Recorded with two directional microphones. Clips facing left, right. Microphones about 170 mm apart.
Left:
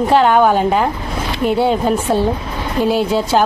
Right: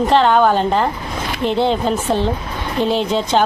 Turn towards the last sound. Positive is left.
turn(degrees=10)  # may be behind; listen again after turning